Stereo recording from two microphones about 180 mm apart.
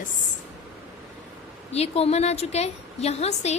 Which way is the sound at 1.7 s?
35° left (ahead or behind).